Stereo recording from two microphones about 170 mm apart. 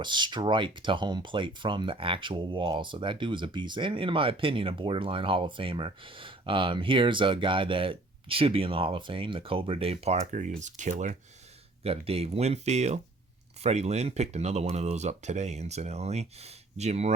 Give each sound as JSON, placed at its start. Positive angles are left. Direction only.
{"t": 0.0, "sound": "speech", "side_deg": -25}